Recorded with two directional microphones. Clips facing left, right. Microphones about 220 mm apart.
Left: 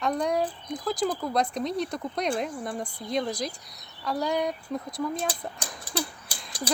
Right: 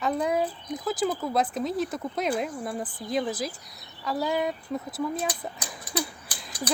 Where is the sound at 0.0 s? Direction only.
5° right (ahead or behind).